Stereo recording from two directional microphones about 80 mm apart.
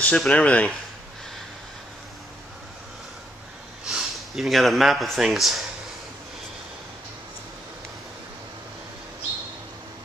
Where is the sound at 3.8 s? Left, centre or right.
Centre.